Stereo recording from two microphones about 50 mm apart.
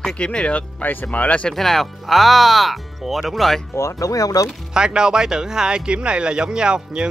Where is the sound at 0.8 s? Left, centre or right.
Left.